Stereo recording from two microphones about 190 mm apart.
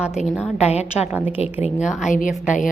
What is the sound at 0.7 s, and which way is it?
Speech, 35° left (ahead or behind).